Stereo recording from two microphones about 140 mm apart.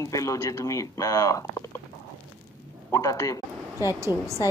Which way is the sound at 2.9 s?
25° left (ahead or behind).